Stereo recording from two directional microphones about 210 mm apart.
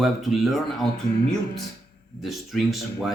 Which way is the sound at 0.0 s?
Centre (ahead or behind).